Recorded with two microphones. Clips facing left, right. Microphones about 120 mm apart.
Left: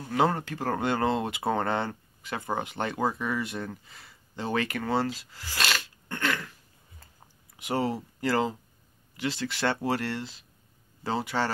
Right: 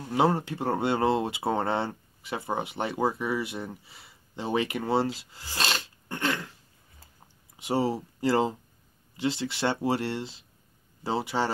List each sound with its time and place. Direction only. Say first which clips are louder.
0.1 s speech: right 1 dB; 20° right (ahead or behind)
7.5 s speech: right 2 dB; 20° right (ahead or behind)